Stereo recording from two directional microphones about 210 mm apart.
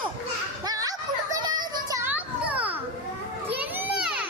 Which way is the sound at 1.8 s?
15° right (ahead or behind).